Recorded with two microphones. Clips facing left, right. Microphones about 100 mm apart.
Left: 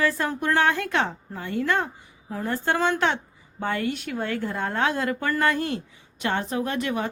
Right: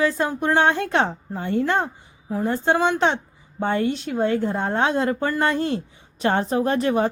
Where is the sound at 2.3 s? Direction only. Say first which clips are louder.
Right 5 dB; 20° right (ahead or behind).